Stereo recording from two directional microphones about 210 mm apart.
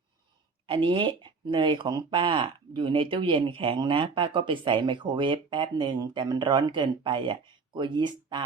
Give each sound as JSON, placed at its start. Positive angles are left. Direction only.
{"t": 0.7, "sound": "speech", "side_deg": -25}